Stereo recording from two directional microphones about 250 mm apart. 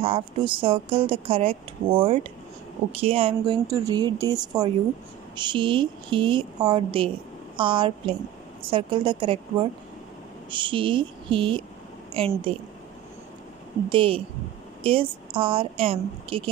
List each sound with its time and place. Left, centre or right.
0.0 s a woman's voice: right
13.8 s speech: right